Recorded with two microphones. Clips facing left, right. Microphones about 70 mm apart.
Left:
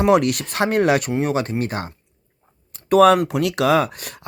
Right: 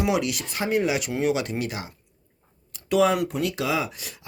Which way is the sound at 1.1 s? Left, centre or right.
Left.